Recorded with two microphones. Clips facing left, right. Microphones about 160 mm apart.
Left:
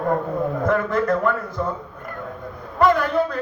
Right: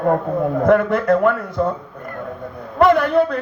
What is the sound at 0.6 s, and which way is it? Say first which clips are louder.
Speech: right 6 dB; 70° right (ahead or behind).